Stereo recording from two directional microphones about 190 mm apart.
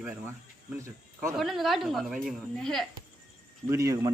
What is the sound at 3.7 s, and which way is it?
Speech, 15° right (ahead or behind).